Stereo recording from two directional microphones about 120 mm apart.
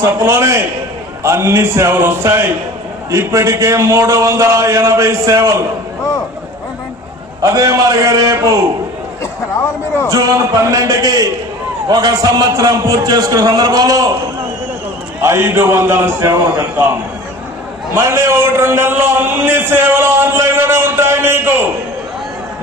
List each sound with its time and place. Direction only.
0.0 s a man's voice: 25° right (ahead or behind)
7.4 s a man's voice: 30° right (ahead or behind)
10.1 s a man's voice: 25° right (ahead or behind)
15.2 s a man's voice: 20° right (ahead or behind)